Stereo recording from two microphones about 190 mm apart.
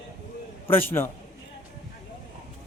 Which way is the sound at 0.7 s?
10° left (ahead or behind).